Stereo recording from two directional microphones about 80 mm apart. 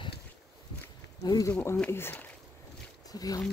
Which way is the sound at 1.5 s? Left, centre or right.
Left.